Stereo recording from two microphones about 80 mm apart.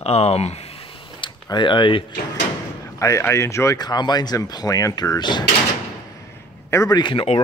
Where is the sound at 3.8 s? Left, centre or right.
Left.